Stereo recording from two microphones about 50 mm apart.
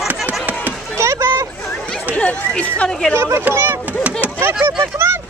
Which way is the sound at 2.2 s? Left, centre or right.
Left.